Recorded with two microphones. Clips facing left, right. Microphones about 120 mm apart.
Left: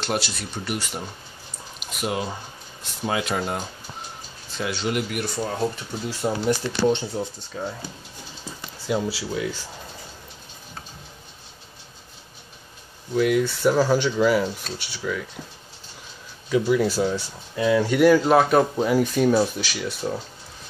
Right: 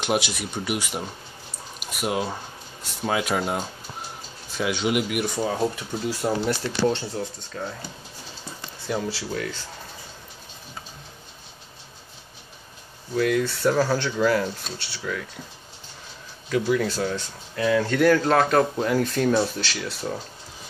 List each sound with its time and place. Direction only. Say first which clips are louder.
0.0 s speech: right 2 dB; 15° right (ahead or behind)
6.9 s speech: left 3 dB; 20° left (ahead or behind)
13.1 s speech: left 2 dB; 10° left (ahead or behind)
16.4 s speech: left 2 dB; 5° left (ahead or behind)